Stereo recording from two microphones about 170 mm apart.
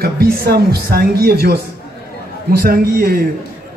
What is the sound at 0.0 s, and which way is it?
A man's voice, 65° right (ahead or behind).